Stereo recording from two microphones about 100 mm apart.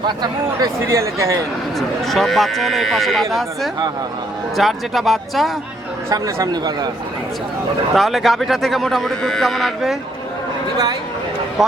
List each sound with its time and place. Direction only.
0.2 s speech: 35° right (ahead or behind)
2.0 s a man's voice: centre (ahead or behind)
4.5 s a man's voice: centre (ahead or behind)
6.1 s speech: 35° right (ahead or behind)
7.9 s a man's voice: centre (ahead or behind)